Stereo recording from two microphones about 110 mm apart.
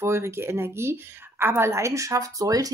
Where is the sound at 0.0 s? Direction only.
25° right (ahead or behind).